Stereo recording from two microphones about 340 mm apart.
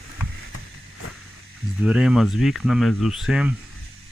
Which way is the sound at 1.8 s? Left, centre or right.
Centre.